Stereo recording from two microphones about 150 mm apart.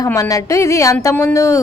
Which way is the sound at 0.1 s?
20° left (ahead or behind).